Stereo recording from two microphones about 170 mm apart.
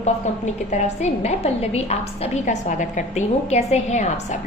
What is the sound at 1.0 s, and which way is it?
A woman's voice, 40° left (ahead or behind).